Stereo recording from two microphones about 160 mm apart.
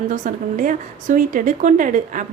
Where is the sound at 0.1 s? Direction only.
50° right (ahead or behind).